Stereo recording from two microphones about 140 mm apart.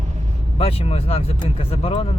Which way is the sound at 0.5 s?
45° left (ahead or behind).